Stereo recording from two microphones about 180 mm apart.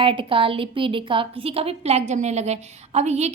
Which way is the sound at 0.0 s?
30° right (ahead or behind).